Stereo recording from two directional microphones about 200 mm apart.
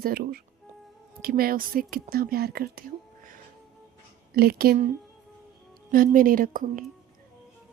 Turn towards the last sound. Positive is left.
turn(degrees=-45)  # may be behind; listen again after turning